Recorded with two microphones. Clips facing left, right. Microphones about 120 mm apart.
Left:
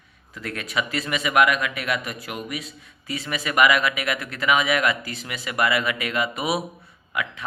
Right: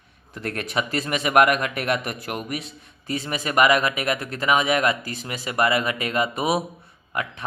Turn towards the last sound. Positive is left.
turn(degrees=-40)  # may be behind; listen again after turning